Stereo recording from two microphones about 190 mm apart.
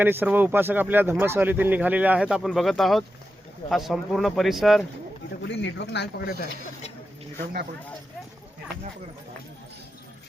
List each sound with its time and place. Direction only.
0.0 s speech: 10° right (ahead or behind)
5.5 s speech: 65° left (ahead or behind)